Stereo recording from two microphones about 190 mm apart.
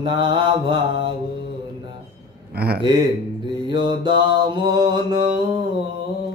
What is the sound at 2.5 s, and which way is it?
Speech, 55° right (ahead or behind).